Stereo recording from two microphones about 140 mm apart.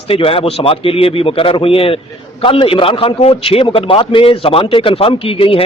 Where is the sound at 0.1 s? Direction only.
40° left (ahead or behind).